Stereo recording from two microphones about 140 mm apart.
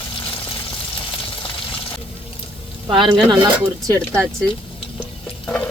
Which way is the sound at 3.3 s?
25° right (ahead or behind).